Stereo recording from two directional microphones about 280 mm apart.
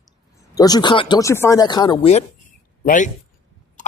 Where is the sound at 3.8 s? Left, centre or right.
Left.